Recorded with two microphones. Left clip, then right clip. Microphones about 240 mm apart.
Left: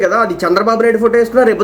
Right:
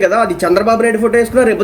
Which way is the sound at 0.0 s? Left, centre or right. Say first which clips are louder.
Right 1 dB; right.